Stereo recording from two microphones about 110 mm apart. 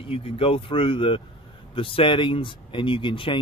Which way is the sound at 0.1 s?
55° left (ahead or behind).